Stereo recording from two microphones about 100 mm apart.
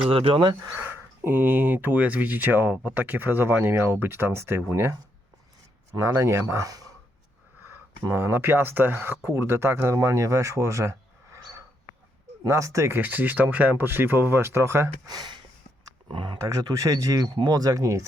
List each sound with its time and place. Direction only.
0.0 s speech: 70° right (ahead or behind)
0.7 s speech: 20° right (ahead or behind)
8.0 s speech: 25° right (ahead or behind)
13.0 s speech: 20° right (ahead or behind)
15.0 s speech: 45° right (ahead or behind)
16.4 s speech: 35° right (ahead or behind)